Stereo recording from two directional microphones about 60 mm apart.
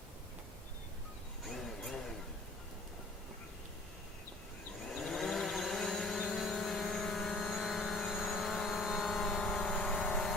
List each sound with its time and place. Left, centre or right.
1.5 s vehicle: centre
4.9 s vehicle: centre